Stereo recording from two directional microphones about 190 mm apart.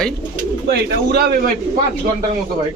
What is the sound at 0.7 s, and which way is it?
Speech, 55° right (ahead or behind).